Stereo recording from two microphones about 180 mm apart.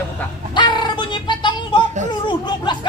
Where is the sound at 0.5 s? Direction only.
25° left (ahead or behind).